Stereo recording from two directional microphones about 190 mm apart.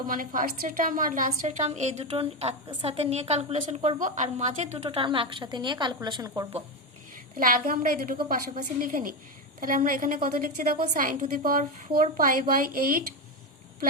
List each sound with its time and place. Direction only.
0.1 s a woman's voice: 45° right (ahead or behind); by 6.5 s 15° right (ahead or behind)
7.3 s a woman's voice: 45° right (ahead or behind)